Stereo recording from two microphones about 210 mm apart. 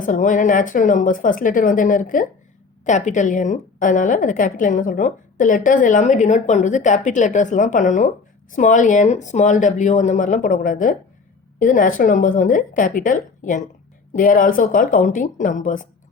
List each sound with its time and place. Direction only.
0.0 s a woman's voice: 40° left (ahead or behind)